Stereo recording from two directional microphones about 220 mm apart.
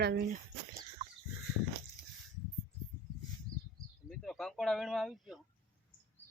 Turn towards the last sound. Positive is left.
turn(degrees=0)  # may be behind; listen again after turning